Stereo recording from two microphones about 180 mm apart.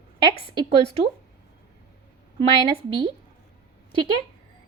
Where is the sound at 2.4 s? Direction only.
30° right (ahead or behind).